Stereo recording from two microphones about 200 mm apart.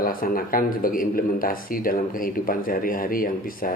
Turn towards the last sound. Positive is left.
turn(degrees=45)  # may be behind; listen again after turning